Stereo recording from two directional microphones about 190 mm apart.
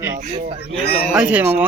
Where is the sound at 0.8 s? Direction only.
55° left (ahead or behind).